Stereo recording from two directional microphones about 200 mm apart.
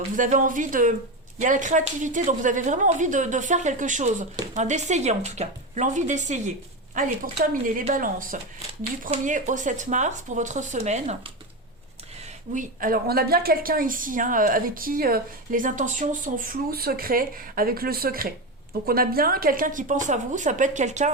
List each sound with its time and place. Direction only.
0.2 s a woman's voice: 40° right (ahead or behind)
7.8 s a woman's voice: 40° right (ahead or behind)
12.5 s a woman's voice: 45° right (ahead or behind)